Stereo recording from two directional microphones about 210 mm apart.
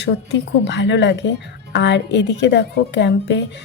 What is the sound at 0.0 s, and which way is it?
Speech, 55° left (ahead or behind).